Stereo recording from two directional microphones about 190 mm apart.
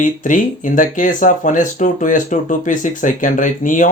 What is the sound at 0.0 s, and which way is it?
Speech, 45° left (ahead or behind).